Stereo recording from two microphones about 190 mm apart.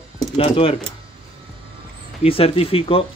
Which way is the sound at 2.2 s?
30° left (ahead or behind).